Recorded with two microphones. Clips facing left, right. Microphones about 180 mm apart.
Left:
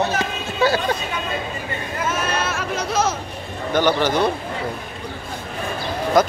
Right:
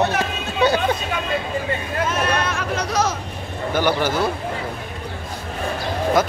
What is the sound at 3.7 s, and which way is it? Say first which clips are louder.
Speech: left 2 dB; 10° right (ahead or behind).